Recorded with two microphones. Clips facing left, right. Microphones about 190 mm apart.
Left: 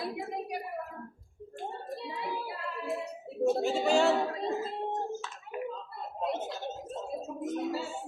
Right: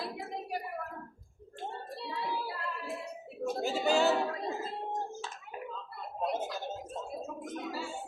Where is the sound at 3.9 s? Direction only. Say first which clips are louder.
Left 1 dB; centre (ahead or behind).